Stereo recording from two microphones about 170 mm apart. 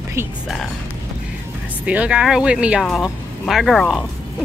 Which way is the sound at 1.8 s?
5° right (ahead or behind).